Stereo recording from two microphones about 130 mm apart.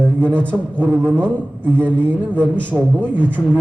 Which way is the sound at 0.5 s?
15° right (ahead or behind).